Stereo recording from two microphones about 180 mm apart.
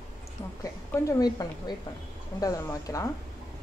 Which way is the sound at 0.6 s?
20° left (ahead or behind).